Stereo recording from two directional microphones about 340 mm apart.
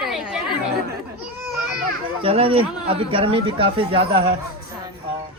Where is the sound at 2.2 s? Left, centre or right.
Centre.